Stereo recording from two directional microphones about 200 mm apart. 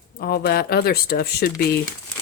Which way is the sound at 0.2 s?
50° left (ahead or behind).